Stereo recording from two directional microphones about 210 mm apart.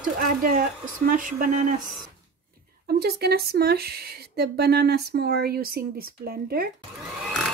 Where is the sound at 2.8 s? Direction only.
50° right (ahead or behind).